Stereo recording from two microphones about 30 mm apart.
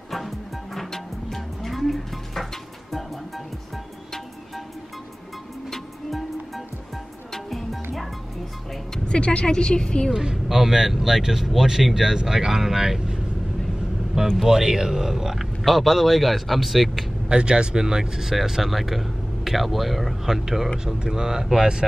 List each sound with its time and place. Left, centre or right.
0.7 s music: centre
6.0 s music: centre
9.0 s a woman's voice: left
10.1 s speech: right
10.5 s speech: centre
14.3 s speech: centre
15.6 s speech: centre
17.3 s speech: right
18.2 s speech: centre
20.8 s speech: right